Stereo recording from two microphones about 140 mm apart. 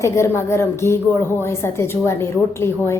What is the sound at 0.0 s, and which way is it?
A woman's voice, 20° left (ahead or behind).